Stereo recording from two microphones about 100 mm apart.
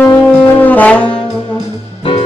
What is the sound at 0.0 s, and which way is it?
Brass instrument, 20° left (ahead or behind).